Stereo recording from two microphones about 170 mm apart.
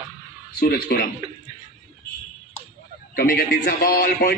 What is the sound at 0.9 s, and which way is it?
Speech, 70° left (ahead or behind).